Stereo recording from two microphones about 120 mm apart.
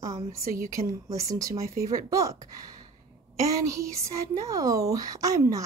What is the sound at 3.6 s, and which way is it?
Speech, 25° right (ahead or behind).